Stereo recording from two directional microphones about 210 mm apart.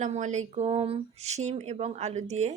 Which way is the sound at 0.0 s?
35° right (ahead or behind).